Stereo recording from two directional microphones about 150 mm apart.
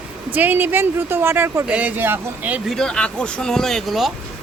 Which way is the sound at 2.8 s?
5° left (ahead or behind).